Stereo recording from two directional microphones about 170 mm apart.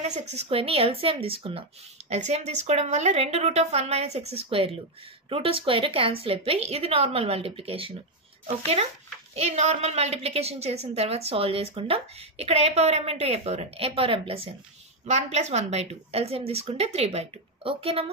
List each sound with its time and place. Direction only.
0.0 s a woman's voice: 40° right (ahead or behind)
9.3 s a woman's voice: 40° right (ahead or behind)